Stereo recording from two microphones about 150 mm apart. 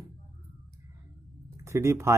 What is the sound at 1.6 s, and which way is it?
Speech, 20° right (ahead or behind).